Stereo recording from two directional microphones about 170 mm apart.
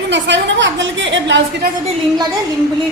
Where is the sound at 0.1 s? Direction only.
90° right.